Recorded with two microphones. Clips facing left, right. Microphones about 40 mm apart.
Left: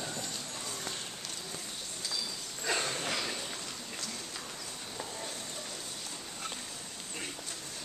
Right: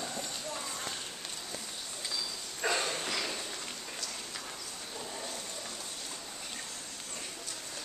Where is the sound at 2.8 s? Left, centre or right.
Centre.